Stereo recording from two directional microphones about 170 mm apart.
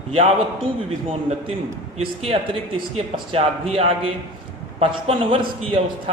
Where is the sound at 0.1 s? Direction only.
35° right (ahead or behind).